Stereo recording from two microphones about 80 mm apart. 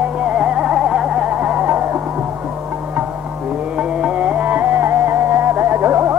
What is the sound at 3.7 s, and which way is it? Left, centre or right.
Music, centre.